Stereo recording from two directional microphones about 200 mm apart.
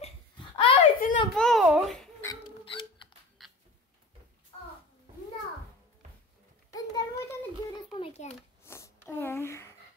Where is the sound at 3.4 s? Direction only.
Centre (ahead or behind).